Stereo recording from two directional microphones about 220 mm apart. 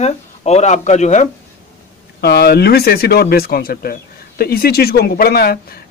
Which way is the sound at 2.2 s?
50° left (ahead or behind).